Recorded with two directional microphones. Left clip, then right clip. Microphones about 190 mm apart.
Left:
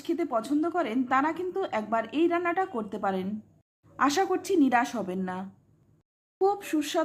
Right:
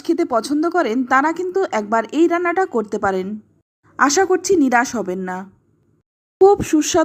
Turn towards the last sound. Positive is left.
turn(degrees=-30)  # may be behind; listen again after turning